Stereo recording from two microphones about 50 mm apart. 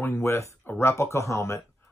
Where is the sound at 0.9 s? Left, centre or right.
Left.